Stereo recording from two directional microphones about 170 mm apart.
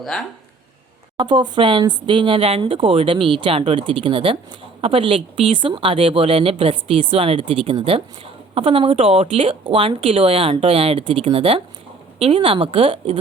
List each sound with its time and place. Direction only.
0.0 s speech: centre (ahead or behind)
1.1 s speech: 30° right (ahead or behind)